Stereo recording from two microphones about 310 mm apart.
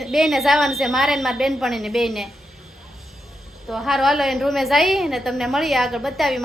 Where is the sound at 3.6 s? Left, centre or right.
Centre.